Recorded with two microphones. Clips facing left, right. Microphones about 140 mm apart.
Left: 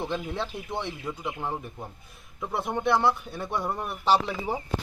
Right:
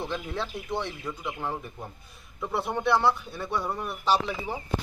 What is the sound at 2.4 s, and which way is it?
Frying, centre (ahead or behind).